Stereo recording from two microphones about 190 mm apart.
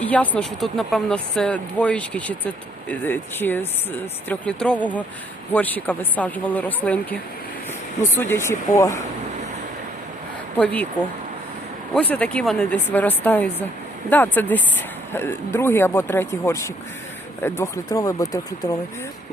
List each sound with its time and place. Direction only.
0.0 s speech: 5° left (ahead or behind)
8.2 s speech: 15° left (ahead or behind)
10.6 s speech: 5° left (ahead or behind)
11.9 s speech: 5° left (ahead or behind)